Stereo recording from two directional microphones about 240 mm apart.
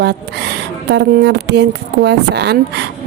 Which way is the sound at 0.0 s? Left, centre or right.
Right.